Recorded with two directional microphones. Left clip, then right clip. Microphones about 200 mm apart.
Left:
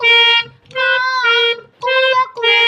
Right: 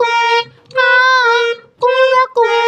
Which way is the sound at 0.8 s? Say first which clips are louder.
Right 5 dB; 55° right (ahead or behind).